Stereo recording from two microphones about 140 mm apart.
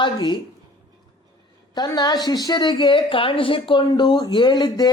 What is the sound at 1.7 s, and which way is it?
A woman's voice, 30° left (ahead or behind).